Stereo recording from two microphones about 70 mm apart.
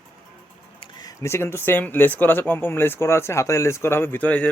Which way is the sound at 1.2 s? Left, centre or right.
Left.